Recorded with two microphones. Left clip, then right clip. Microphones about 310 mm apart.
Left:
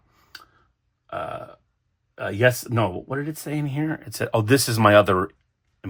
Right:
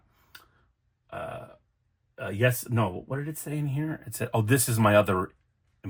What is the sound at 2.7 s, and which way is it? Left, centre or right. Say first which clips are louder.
Speech: left 6 dB; left.